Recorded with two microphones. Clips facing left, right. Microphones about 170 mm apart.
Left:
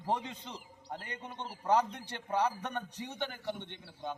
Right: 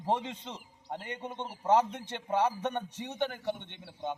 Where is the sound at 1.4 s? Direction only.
25° right (ahead or behind).